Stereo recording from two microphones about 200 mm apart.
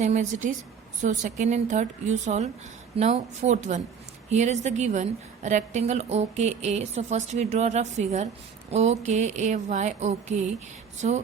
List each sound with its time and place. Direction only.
0.0 s a woman's voice: 35° right (ahead or behind)